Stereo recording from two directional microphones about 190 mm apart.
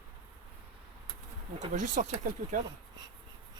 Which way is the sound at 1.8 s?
40° right (ahead or behind).